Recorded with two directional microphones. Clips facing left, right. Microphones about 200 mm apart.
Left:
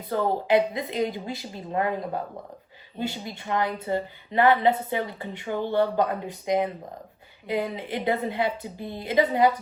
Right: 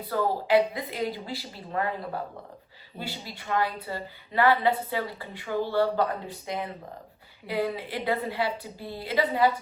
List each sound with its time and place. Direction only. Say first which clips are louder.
0.1 s a woman's voice: left 1 dB; 20° left (ahead or behind)
3.0 s a woman's voice: left 6 dB; 20° left (ahead or behind)